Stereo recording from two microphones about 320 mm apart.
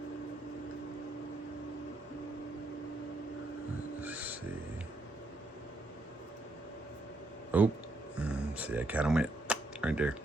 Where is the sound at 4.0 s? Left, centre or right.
Centre.